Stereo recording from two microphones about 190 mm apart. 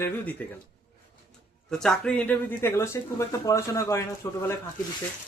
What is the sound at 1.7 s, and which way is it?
Speech, 5° left (ahead or behind).